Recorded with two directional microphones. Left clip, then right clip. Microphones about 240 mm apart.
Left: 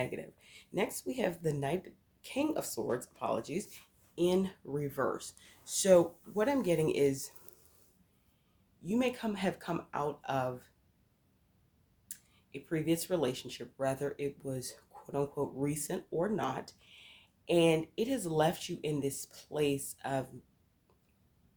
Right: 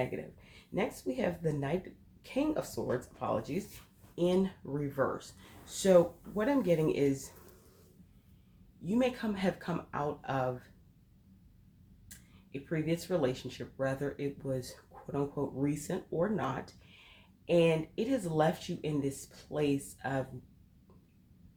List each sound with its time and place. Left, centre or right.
0.0 s speech: left
8.9 s speech: left
12.0 s speech: left